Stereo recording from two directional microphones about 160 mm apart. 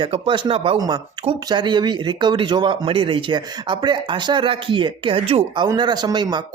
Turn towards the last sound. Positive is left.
turn(degrees=-25)  # may be behind; listen again after turning